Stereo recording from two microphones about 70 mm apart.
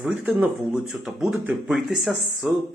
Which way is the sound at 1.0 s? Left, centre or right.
Centre.